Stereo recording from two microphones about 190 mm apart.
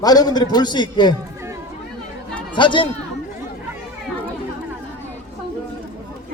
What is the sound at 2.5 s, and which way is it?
Speech, 25° left (ahead or behind).